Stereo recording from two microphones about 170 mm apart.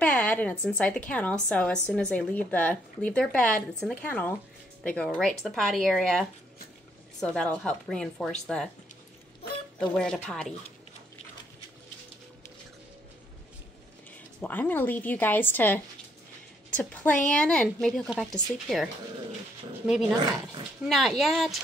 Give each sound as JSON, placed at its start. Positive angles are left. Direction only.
{"t": 0.0, "sound": "a woman's voice", "side_deg": 10}
{"t": 9.8, "sound": "a woman's voice", "side_deg": 5}
{"t": 14.1, "sound": "a woman's voice", "side_deg": 10}
{"t": 20.8, "sound": "a woman's voice", "side_deg": 0}